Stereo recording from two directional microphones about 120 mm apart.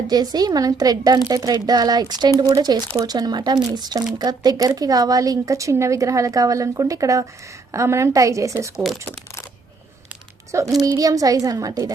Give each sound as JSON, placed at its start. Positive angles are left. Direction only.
{"t": 0.1, "sound": "a child's voice", "side_deg": -35}
{"t": 8.7, "sound": "speech", "side_deg": 0}
{"t": 10.8, "sound": "a child's voice", "side_deg": -30}